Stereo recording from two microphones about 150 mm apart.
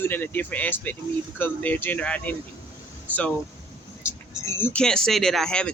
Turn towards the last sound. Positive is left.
turn(degrees=5)  # may be behind; listen again after turning